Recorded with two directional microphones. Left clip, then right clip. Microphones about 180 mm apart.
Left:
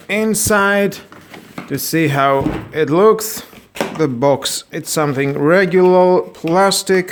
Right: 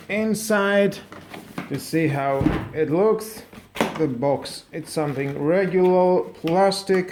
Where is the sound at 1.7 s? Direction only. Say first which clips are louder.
Left 8 dB; 45° left (ahead or behind).